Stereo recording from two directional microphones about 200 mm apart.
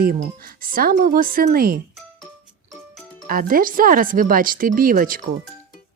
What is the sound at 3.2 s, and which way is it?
Speech, 45° right (ahead or behind).